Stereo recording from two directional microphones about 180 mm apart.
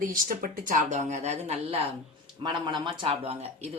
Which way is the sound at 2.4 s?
25° right (ahead or behind).